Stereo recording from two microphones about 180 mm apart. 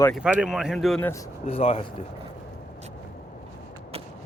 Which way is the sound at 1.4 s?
35° left (ahead or behind).